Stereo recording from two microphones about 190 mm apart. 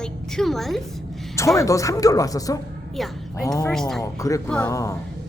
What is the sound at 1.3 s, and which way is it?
Speech, 15° left (ahead or behind).